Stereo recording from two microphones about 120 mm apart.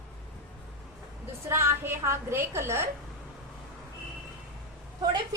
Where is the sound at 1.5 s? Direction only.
20° right (ahead or behind).